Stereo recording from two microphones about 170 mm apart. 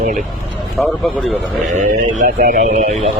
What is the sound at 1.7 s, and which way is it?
Speech, 55° right (ahead or behind).